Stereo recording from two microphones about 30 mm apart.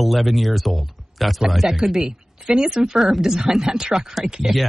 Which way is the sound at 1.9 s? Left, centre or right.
Right.